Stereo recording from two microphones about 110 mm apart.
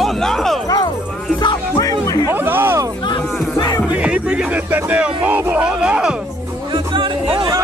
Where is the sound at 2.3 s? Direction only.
20° right (ahead or behind).